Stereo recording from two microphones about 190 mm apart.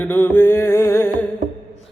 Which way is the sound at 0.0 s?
10° left (ahead or behind).